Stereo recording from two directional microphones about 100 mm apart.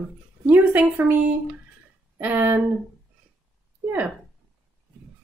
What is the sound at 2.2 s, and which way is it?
Speech, 15° right (ahead or behind).